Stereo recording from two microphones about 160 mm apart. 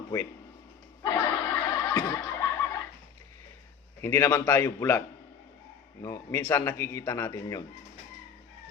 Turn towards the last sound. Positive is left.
turn(degrees=20)  # may be behind; listen again after turning